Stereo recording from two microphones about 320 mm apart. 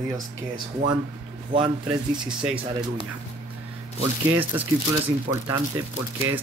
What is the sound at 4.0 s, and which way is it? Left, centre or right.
Speech, centre.